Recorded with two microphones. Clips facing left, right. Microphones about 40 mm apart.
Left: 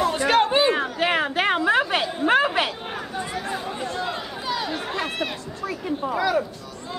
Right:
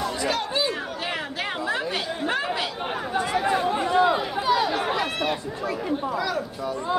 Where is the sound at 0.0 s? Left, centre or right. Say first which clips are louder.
Left 7 dB; left.